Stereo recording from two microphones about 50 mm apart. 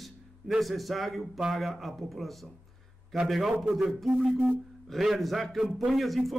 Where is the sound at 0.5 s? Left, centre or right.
Centre.